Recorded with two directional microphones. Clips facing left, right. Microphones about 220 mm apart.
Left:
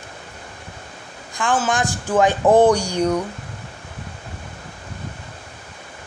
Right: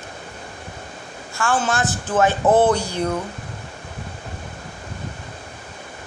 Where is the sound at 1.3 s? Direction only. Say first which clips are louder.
Left 1 dB; 15° left (ahead or behind).